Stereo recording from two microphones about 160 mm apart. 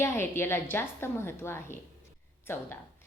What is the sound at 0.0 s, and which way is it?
A woman's voice, 15° left (ahead or behind).